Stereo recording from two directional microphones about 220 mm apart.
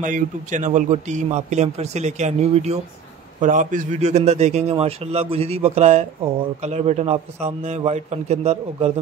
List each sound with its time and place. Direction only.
0.0 s a man's voice: 35° right (ahead or behind)